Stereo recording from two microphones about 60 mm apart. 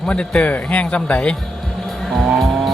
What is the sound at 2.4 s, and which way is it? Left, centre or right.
Music, centre.